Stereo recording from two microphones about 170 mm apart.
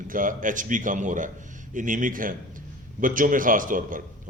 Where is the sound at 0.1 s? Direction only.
50° right (ahead or behind).